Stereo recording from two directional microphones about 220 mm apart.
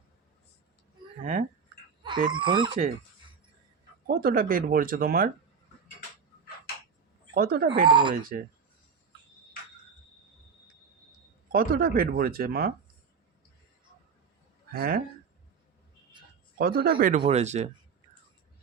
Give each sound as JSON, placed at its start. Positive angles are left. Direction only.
{"t": 1.2, "sound": "speech", "side_deg": -35}
{"t": 2.3, "sound": "speech", "side_deg": -20}
{"t": 4.0, "sound": "speech", "side_deg": -40}
{"t": 7.3, "sound": "speech", "side_deg": -40}
{"t": 7.9, "sound": "speech", "side_deg": -20}
{"t": 8.1, "sound": "speech", "side_deg": -40}
{"t": 11.5, "sound": "speech", "side_deg": -45}
{"t": 14.8, "sound": "speech", "side_deg": -45}
{"t": 16.6, "sound": "speech", "side_deg": -45}